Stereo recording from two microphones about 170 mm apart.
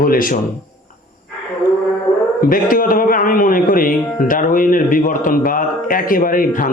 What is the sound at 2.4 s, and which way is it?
A man's voice, 55° left (ahead or behind).